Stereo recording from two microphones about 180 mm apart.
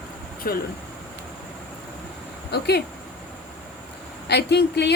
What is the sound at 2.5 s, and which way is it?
Speech, 65° left (ahead or behind).